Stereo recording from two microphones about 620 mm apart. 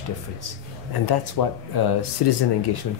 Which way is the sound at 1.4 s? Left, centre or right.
Left.